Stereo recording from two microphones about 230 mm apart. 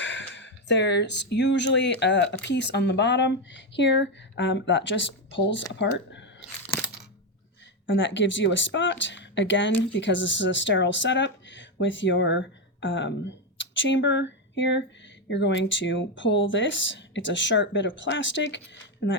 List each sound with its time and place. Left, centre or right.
0.0 s speech: left
7.9 s speech: left